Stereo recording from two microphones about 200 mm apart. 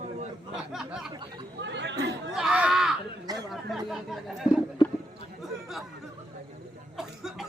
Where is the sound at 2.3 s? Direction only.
5° right (ahead or behind).